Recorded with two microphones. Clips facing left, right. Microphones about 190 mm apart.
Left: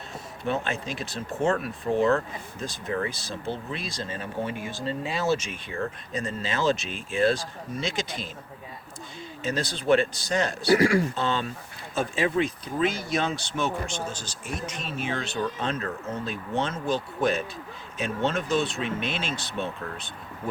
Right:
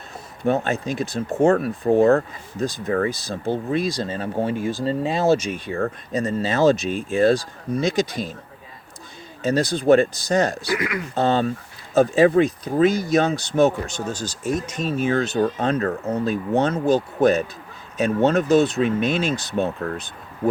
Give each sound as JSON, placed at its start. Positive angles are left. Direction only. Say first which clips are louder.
{"t": 0.4, "sound": "speech", "louder": "right 7 dB", "side_deg": -45}
{"t": 9.4, "sound": "speech", "louder": "right 9 dB", "side_deg": -40}
{"t": 10.7, "sound": "speech", "louder": "left 5 dB", "side_deg": 30}
{"t": 11.1, "sound": "speech", "louder": "right 8 dB", "side_deg": -45}